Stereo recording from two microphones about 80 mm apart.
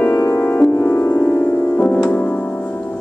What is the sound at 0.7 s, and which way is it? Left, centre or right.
Music, left.